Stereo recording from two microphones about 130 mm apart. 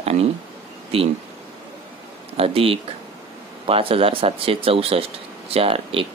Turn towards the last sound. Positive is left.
turn(degrees=-45)  # may be behind; listen again after turning